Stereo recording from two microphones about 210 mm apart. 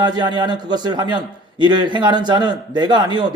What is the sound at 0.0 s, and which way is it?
A man's voice, 20° right (ahead or behind).